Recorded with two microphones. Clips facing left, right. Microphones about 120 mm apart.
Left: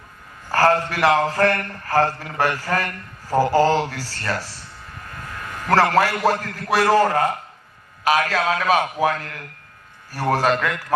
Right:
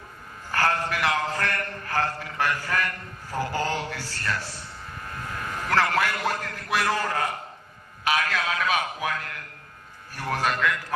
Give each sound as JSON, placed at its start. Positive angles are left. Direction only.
{"t": 0.5, "sound": "a man's voice", "side_deg": 40}
{"t": 5.6, "sound": "a man's voice", "side_deg": 40}